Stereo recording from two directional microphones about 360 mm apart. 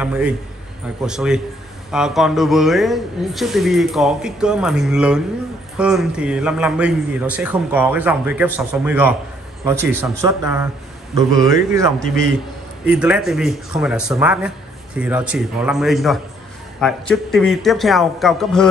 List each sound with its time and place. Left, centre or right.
0.0 s a man's voice: centre